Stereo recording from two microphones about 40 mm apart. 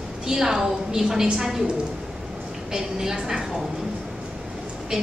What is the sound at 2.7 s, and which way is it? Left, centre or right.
Speech, centre.